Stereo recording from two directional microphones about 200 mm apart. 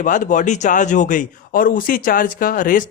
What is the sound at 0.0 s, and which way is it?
Speech, 40° left (ahead or behind).